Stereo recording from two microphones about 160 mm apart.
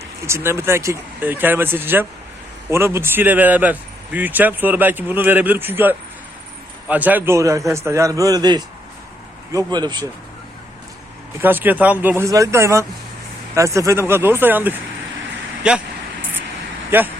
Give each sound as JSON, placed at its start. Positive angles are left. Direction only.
{"t": 0.3, "sound": "a man's voice", "side_deg": -15}
{"t": 11.3, "sound": "speech", "side_deg": -10}
{"t": 16.9, "sound": "speech", "side_deg": -15}